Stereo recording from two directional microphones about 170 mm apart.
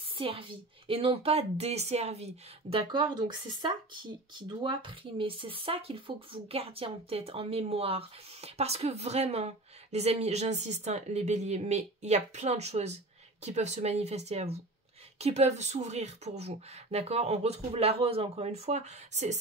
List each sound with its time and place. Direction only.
0.2 s speech: 30° right (ahead or behind)